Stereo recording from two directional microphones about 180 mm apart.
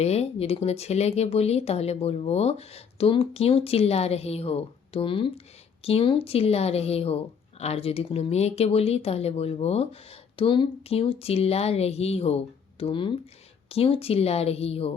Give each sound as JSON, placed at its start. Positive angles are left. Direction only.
{"t": 0.0, "sound": "speech", "side_deg": 35}